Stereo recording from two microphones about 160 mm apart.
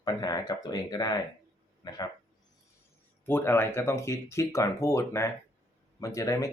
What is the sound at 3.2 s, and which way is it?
Speech, 15° left (ahead or behind).